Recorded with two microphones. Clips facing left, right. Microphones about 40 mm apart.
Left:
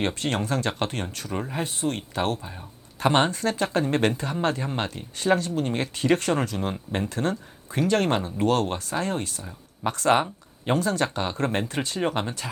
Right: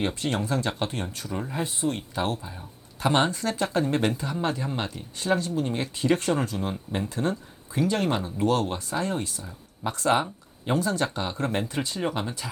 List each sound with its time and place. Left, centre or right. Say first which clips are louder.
0.0 s speech: left 1 dB; left
1.4 s speech: left 1 dB; left
1.6 s speech: even; left
6.6 s speech: left 2 dB; left